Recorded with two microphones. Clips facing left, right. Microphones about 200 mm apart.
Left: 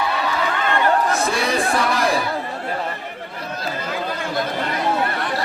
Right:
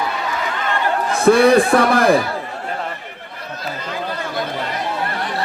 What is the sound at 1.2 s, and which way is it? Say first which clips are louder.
Speech: right 10 dB; 55° right (ahead or behind).